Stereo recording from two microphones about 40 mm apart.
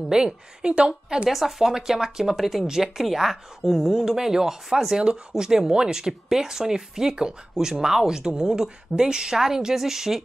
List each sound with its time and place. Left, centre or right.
0.1 s a woman's voice: centre
1.3 s speech: centre